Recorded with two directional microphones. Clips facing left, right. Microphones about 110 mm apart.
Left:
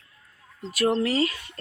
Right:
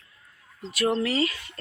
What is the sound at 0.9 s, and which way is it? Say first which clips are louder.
Speech: left 2 dB; 35° left (ahead or behind).